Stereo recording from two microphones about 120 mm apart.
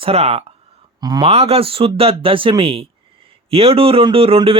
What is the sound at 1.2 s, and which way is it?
Speech, 60° right (ahead or behind).